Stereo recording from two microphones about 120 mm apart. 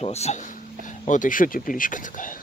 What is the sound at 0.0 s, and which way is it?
Speech, 60° left (ahead or behind).